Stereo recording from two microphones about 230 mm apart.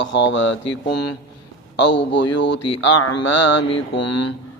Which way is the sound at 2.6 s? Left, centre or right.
Left.